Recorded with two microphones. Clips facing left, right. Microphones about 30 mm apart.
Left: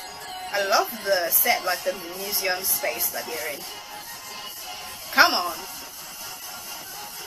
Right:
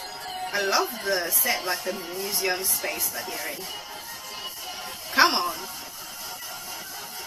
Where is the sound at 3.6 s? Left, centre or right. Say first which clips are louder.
Right 2 dB; centre.